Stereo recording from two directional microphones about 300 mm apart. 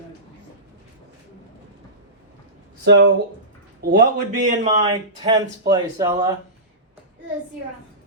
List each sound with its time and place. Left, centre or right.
2.8 s a man's voice: right
4.8 s speech: centre